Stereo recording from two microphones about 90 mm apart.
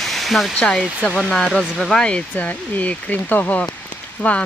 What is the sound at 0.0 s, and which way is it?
Hair dryer, centre (ahead or behind).